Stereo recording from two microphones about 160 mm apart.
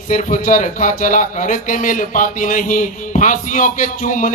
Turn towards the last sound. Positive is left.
turn(degrees=55)  # may be behind; listen again after turning